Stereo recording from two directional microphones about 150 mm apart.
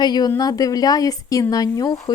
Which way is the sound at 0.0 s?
25° left (ahead or behind).